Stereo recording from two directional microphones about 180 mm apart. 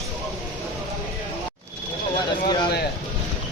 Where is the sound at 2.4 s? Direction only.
25° left (ahead or behind).